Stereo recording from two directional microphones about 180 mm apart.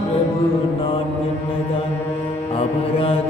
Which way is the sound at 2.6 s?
30° left (ahead or behind).